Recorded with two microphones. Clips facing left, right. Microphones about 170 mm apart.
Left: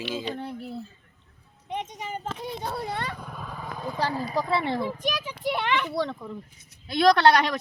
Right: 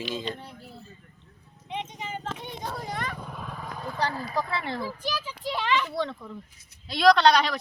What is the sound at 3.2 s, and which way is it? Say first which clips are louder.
Vehicle: even; centre (ahead or behind).